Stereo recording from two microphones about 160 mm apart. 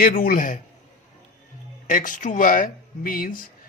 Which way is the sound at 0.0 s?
65° left (ahead or behind).